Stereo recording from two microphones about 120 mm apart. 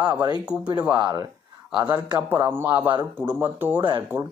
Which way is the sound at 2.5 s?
20° right (ahead or behind).